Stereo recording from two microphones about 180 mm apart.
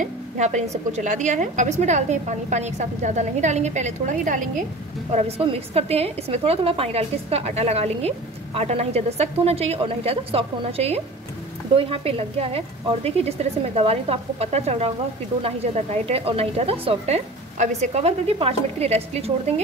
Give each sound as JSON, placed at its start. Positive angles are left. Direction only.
{"t": 0.0, "sound": "a woman's voice", "side_deg": -40}
{"t": 5.1, "sound": "a woman's voice", "side_deg": -35}